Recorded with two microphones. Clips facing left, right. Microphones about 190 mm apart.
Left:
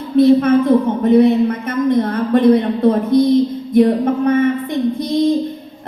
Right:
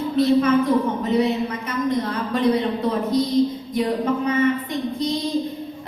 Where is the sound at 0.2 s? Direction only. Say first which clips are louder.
Left 7 dB; 55° left (ahead or behind).